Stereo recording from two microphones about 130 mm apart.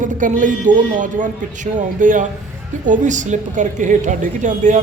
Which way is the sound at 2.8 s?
75° right (ahead or behind).